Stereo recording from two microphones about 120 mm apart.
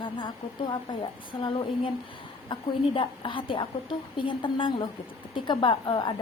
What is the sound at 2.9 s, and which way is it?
A woman's voice, 45° left (ahead or behind).